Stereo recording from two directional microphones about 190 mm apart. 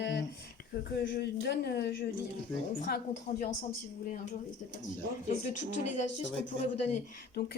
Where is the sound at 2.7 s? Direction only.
45° left (ahead or behind).